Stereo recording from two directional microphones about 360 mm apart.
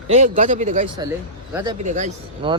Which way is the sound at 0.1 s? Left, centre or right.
Centre.